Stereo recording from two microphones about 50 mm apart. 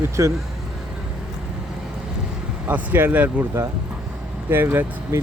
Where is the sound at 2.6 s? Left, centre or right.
Right.